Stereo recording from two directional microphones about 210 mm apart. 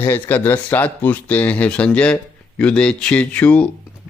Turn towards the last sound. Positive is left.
turn(degrees=5)  # may be behind; listen again after turning